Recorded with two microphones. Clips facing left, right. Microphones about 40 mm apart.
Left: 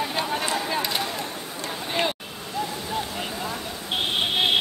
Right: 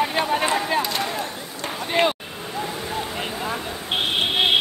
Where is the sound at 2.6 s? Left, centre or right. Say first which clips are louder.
Even; right.